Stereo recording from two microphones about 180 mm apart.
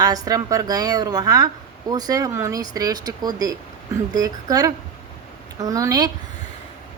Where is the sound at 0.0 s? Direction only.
20° right (ahead or behind).